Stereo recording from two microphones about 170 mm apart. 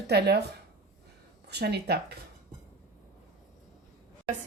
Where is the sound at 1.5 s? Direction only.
75° right (ahead or behind).